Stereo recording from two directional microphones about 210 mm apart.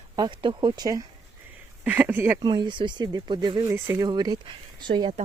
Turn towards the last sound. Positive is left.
turn(degrees=-20)  # may be behind; listen again after turning